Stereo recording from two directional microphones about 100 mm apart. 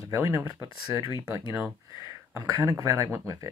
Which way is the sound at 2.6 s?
30° right (ahead or behind).